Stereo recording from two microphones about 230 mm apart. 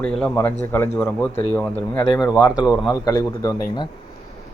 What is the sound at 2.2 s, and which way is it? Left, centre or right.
Speech, centre.